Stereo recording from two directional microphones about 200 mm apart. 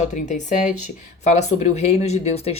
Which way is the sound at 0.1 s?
35° left (ahead or behind).